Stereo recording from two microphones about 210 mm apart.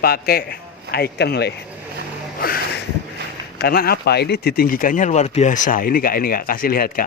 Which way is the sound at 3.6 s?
45° left (ahead or behind).